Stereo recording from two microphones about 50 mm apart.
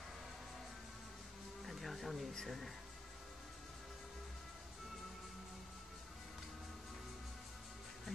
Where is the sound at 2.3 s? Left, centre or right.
Centre.